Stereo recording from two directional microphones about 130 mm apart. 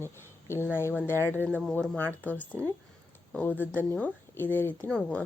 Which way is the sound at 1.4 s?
15° right (ahead or behind).